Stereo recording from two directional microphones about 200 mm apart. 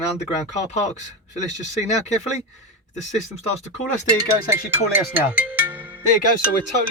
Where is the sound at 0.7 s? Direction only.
35° left (ahead or behind).